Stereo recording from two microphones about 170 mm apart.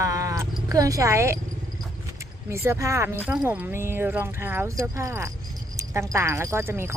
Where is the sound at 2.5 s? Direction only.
15° right (ahead or behind).